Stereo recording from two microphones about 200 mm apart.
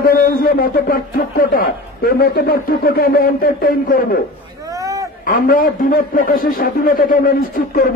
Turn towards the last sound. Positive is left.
turn(degrees=45)  # may be behind; listen again after turning